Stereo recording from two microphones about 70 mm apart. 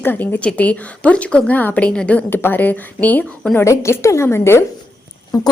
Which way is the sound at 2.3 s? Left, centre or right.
Left.